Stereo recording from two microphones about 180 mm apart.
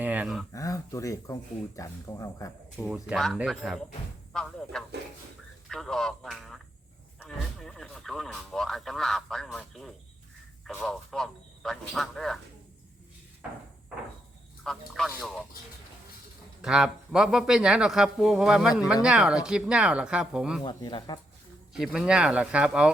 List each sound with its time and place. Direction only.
0.0 s a sound: 10° right (ahead or behind)
0.5 s speech: 20° left (ahead or behind)
2.7 s speech: 5° right (ahead or behind)
14.6 s speech: centre (ahead or behind)
16.6 s speech: 5° right (ahead or behind)
20.7 s speech: 25° left (ahead or behind)
21.7 s speech: 5° right (ahead or behind)